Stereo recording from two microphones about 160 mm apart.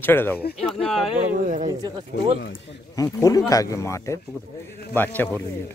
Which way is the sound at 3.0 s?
20° left (ahead or behind).